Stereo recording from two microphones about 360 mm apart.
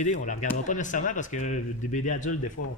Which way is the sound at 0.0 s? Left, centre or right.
Left.